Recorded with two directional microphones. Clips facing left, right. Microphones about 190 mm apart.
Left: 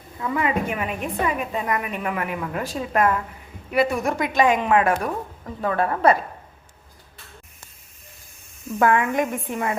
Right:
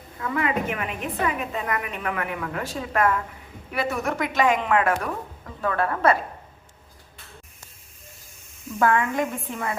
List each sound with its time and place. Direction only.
0.2 s a woman's voice: 20° left (ahead or behind)
8.8 s speech: 15° left (ahead or behind)